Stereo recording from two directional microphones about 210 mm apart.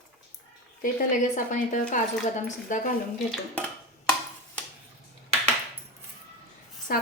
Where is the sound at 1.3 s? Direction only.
35° left (ahead or behind).